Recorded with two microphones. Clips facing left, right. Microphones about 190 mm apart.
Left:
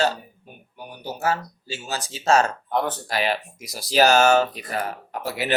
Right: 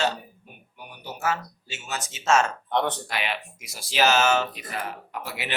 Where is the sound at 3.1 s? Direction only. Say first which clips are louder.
Left 6 dB; 40° left (ahead or behind).